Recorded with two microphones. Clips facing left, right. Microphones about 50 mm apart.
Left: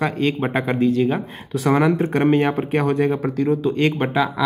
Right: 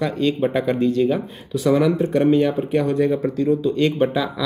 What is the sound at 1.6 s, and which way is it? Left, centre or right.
Speech, left.